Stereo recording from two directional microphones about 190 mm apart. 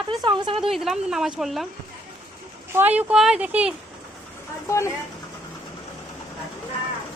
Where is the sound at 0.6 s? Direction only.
Centre (ahead or behind).